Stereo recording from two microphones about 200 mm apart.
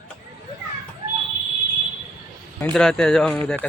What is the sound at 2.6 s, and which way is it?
Speech, 5° left (ahead or behind).